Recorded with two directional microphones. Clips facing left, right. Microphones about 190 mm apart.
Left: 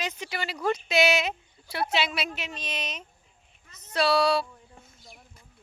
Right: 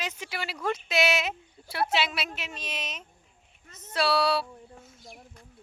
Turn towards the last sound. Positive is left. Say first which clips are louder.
# left 2 dB
turn(degrees=-5)  # may be behind; listen again after turning